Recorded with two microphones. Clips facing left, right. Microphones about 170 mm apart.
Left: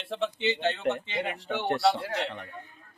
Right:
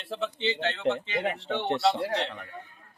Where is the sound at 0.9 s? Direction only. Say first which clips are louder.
Right 3 dB; 25° right (ahead or behind).